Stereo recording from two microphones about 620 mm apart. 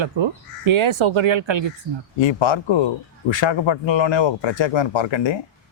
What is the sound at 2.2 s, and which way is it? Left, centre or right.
Speech, left.